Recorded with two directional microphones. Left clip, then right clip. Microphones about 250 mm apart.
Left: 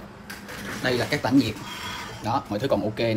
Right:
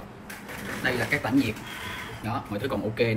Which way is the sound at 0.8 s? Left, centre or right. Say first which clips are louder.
Left 2 dB; centre.